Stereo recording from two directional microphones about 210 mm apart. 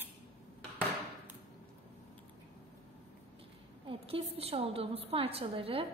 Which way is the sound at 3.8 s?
25° right (ahead or behind).